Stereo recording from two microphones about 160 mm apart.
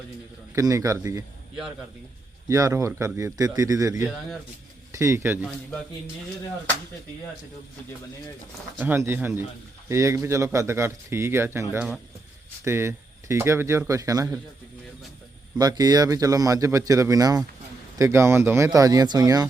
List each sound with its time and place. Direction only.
0.5 s speech: 20° right (ahead or behind)
2.5 s speech: 20° right (ahead or behind)
8.8 s a man's voice: 15° right (ahead or behind)
15.5 s speech: 25° right (ahead or behind)